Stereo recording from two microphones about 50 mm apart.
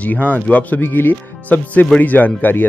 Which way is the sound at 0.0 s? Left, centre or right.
Left.